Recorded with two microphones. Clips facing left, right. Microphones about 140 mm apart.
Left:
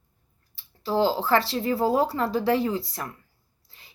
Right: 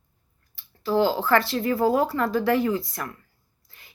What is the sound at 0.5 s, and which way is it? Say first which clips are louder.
Speech: right 2 dB; 30° left (ahead or behind).